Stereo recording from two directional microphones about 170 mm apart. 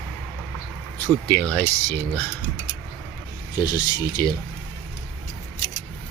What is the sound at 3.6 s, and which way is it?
Speech, 25° left (ahead or behind).